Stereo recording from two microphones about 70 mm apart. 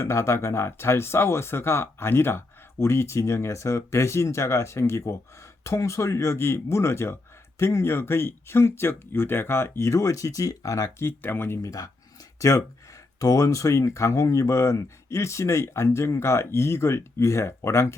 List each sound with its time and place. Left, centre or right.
0.0 s speech: left
11.0 s speech: left
11.6 s speech: left